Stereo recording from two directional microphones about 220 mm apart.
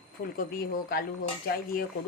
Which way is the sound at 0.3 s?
40° left (ahead or behind).